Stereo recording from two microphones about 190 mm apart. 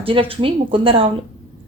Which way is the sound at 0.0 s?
30° right (ahead or behind).